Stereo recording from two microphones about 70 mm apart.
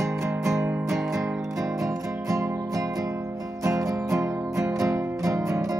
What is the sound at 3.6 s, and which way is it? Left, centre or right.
Music, right.